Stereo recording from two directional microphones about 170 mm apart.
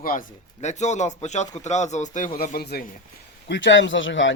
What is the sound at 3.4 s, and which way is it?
Speech, 90° left.